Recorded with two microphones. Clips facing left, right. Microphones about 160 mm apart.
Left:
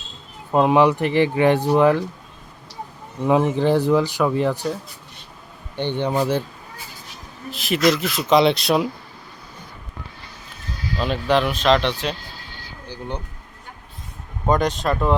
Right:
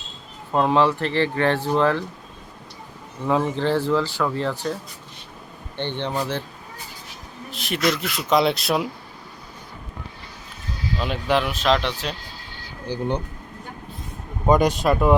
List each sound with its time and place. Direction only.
0.5 s speech: 15° left (ahead or behind)
3.2 s speech: 15° left (ahead or behind)
7.5 s speech: 5° left (ahead or behind)
11.0 s speech: 10° right (ahead or behind)
12.9 s speech: 20° right (ahead or behind)
14.4 s speech: 10° right (ahead or behind)